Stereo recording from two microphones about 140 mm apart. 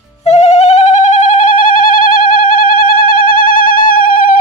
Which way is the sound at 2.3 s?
80° left.